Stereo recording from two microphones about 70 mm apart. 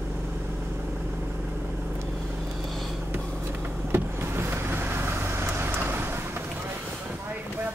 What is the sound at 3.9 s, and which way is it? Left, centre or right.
Vehicle, right.